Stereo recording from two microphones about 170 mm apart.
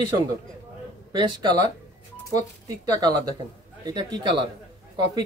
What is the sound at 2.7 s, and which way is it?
Speech, 20° right (ahead or behind).